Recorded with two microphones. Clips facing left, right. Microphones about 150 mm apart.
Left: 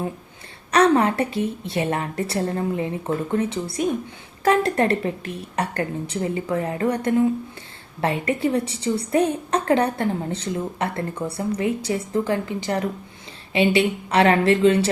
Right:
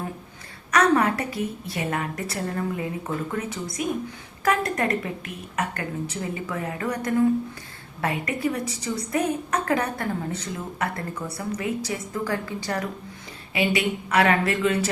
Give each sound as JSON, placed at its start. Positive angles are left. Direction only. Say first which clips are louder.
{"t": 0.7, "sound": "a woman's voice", "louder": "left 3 dB", "side_deg": 30}